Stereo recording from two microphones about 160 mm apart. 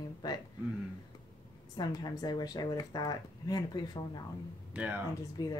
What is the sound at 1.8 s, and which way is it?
Speech, 25° left (ahead or behind).